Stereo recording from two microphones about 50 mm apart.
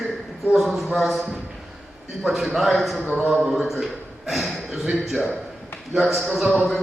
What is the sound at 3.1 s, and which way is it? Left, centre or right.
Speech, centre.